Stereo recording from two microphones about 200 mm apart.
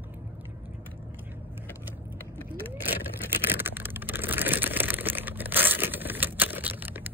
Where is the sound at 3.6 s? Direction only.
10° right (ahead or behind).